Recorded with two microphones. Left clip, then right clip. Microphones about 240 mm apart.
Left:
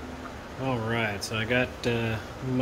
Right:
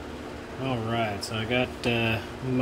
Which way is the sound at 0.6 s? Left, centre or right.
Centre.